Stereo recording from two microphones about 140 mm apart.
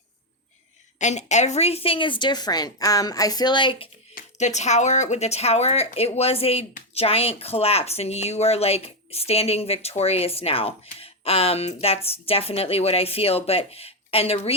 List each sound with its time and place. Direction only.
0.9 s speech: 55° left (ahead or behind); by 3.8 s 35° left (ahead or behind)
4.1 s speech: 55° left (ahead or behind)